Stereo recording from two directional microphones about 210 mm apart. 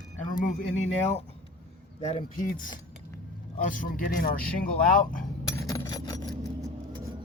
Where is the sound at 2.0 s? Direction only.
30° left (ahead or behind).